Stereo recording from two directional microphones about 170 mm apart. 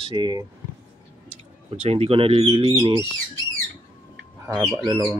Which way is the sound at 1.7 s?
35° right (ahead or behind).